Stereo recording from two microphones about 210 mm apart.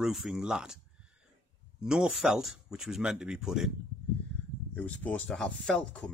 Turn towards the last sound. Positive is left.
turn(degrees=5)  # may be behind; listen again after turning